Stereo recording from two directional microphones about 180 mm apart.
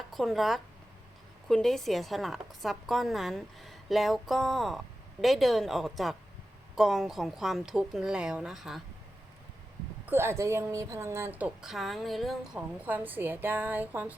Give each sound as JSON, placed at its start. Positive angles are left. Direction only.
{"t": 0.1, "sound": "a woman's voice", "side_deg": 0}
{"t": 10.1, "sound": "a woman's voice", "side_deg": -15}